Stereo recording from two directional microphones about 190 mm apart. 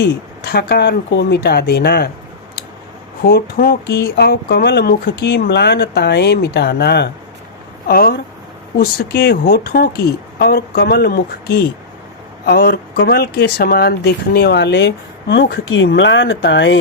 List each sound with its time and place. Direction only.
0.0 s speech: 55° left (ahead or behind)
3.2 s speech: 50° left (ahead or behind)
15.7 s speech: 75° left (ahead or behind)